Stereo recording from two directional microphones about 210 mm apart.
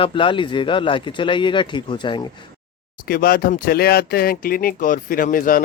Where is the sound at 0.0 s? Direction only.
25° left (ahead or behind).